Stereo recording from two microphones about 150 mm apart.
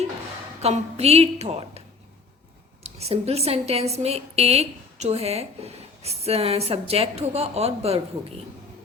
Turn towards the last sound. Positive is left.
turn(degrees=-45)  # may be behind; listen again after turning